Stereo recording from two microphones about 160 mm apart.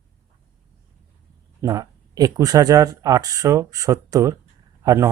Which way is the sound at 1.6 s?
20° right (ahead or behind).